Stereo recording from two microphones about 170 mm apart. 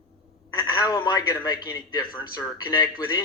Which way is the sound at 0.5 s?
20° left (ahead or behind).